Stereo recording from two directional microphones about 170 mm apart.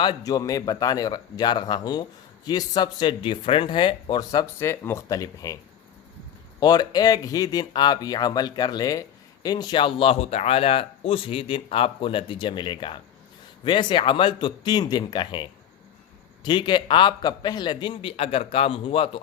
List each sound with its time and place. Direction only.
0.0 s speech: 25° left (ahead or behind)
6.6 s speech: 25° left (ahead or behind)